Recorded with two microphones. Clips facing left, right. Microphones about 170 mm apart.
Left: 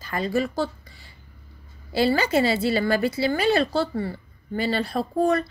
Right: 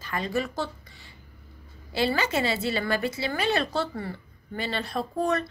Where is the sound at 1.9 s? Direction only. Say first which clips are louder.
Left 5 dB; 35° left (ahead or behind).